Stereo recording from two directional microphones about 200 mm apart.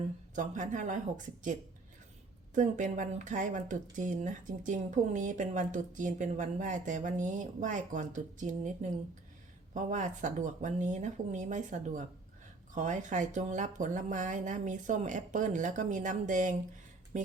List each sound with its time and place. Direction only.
0.3 s speech: 40° right (ahead or behind)
2.6 s speech: 40° right (ahead or behind)
17.1 s a sound: 40° right (ahead or behind)